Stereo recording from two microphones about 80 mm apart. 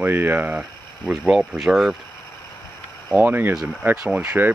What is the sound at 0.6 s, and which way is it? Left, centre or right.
Speech, centre.